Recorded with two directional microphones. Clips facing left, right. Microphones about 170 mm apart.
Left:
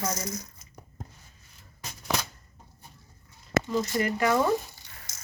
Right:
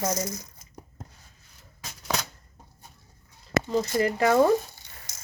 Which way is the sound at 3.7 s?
40° right (ahead or behind).